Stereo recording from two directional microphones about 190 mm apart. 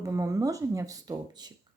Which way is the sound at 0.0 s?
15° right (ahead or behind).